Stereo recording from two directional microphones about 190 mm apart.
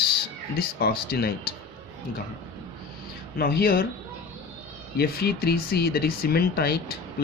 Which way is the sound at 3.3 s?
55° left (ahead or behind).